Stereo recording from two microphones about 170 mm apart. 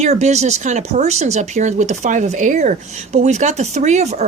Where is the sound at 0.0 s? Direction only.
40° right (ahead or behind).